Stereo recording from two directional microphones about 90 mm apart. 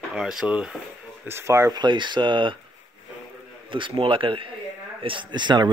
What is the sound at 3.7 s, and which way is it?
Speech, 70° right (ahead or behind).